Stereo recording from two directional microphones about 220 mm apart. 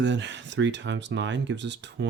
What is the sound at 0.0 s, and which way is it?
Speech, 55° right (ahead or behind).